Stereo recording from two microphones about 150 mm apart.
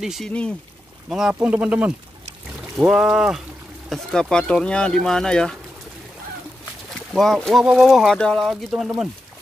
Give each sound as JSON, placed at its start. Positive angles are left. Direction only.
{"t": 0.0, "sound": "speech", "side_deg": -5}
{"t": 7.2, "sound": "speech", "side_deg": 0}